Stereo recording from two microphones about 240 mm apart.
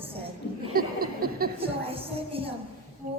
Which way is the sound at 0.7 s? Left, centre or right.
Right.